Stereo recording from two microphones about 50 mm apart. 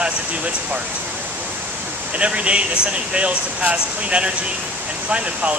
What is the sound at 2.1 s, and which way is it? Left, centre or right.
Speech, right.